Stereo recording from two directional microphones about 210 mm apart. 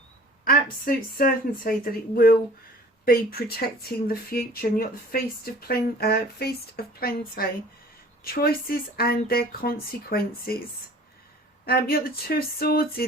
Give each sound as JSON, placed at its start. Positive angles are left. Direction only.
{"t": 0.4, "sound": "speech", "side_deg": 45}
{"t": 3.4, "sound": "speech", "side_deg": 50}
{"t": 11.6, "sound": "speech", "side_deg": 45}